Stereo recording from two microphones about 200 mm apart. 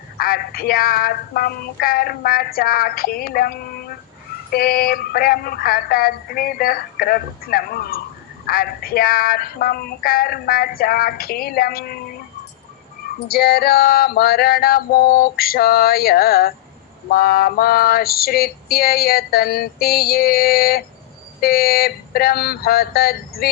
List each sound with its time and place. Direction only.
0.2 s female singing: 50° left (ahead or behind)
4.5 s female singing: 45° left (ahead or behind)
13.1 s female singing: 50° left (ahead or behind)